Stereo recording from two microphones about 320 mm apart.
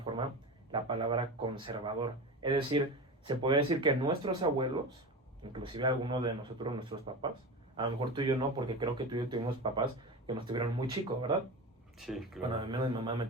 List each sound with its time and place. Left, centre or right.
0.7 s a man's voice: centre
11.9 s speech: centre
12.6 s a man's voice: centre